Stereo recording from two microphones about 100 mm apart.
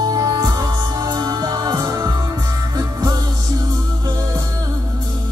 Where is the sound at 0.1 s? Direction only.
35° right (ahead or behind).